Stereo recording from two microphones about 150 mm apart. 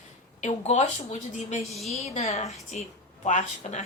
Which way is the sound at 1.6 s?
Centre (ahead or behind).